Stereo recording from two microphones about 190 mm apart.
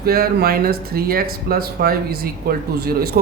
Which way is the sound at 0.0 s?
55° right (ahead or behind).